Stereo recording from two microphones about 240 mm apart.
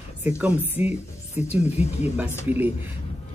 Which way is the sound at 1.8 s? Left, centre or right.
Left.